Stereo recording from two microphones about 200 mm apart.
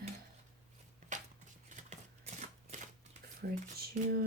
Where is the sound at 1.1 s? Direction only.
40° right (ahead or behind).